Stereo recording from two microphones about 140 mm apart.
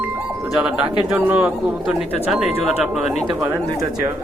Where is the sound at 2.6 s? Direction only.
5° right (ahead or behind).